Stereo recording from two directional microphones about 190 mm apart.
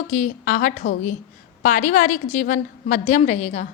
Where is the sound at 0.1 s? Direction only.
45° left (ahead or behind).